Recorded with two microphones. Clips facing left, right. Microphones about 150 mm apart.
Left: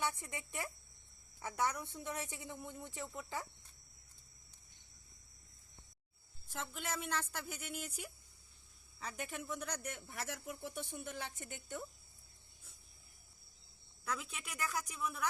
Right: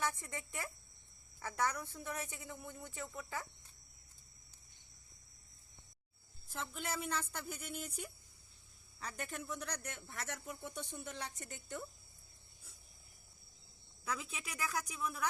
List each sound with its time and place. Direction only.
0.1 s speech: 20° left (ahead or behind)
6.5 s a man's voice: centre (ahead or behind)
14.0 s a man's voice: centre (ahead or behind)